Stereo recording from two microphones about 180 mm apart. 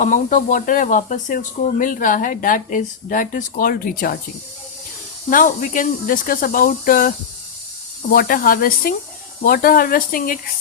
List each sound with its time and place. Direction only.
0.0 s speech: 45° left (ahead or behind)
5.3 s speech: 50° left (ahead or behind)
8.1 s speech: 55° left (ahead or behind)